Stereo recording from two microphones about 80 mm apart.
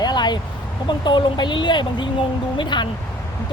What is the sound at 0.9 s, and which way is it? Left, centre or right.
Speech, left.